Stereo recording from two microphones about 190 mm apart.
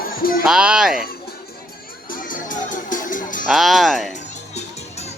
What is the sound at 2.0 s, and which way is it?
Music, 45° left (ahead or behind).